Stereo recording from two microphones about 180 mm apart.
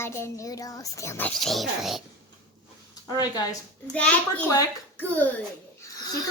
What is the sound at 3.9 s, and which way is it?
A child's voice, 5° left (ahead or behind).